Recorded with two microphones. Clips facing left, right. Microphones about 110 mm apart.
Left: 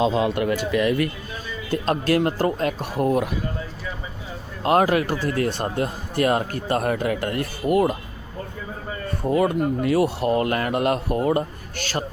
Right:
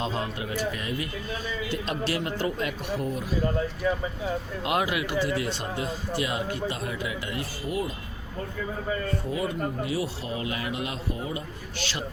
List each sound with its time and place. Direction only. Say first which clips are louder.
0.2 s speech: left 9 dB; 70° left (ahead or behind)
1.7 s a man's voice: left 10 dB; 50° left (ahead or behind)
4.6 s a man's voice: left 10 dB; 45° left (ahead or behind); by 7.9 s 60° left (ahead or behind)
9.2 s speech: left 9 dB; 55° left (ahead or behind)